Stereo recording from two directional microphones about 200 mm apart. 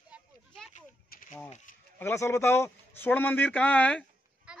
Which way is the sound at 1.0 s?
45° left (ahead or behind).